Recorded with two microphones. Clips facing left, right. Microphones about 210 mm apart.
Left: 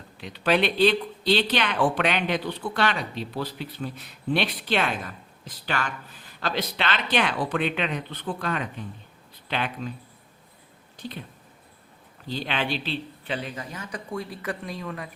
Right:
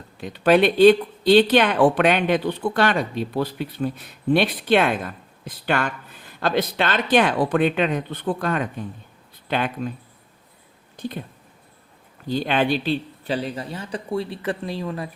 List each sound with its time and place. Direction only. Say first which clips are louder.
0.2 s speech: right 7 dB; 50° right (ahead or behind)
10.9 s speech: right 7 dB; 50° right (ahead or behind)
12.3 s speech: right 8 dB; 50° right (ahead or behind); by 15.1 s 30° right (ahead or behind)